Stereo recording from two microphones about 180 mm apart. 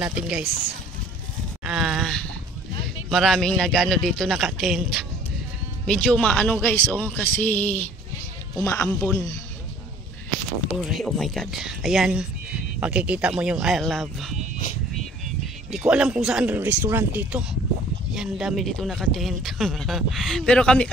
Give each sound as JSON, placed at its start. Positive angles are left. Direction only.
{"t": 0.0, "sound": "speech", "side_deg": -5}
{"t": 1.6, "sound": "a sound", "side_deg": -5}
{"t": 3.1, "sound": "speech", "side_deg": 0}
{"t": 10.7, "sound": "speech", "side_deg": 0}
{"t": 15.4, "sound": "speech", "side_deg": -5}